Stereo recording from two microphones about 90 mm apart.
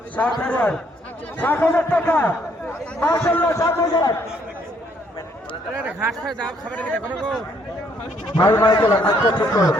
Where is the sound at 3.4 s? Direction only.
30° left (ahead or behind).